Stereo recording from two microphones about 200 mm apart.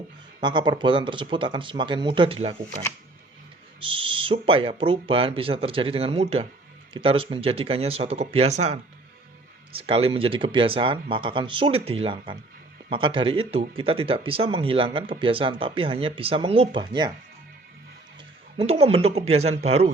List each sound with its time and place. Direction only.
0.3 s speech: 25° right (ahead or behind)
3.8 s speech: 25° right (ahead or behind)
18.5 s speech: 30° right (ahead or behind)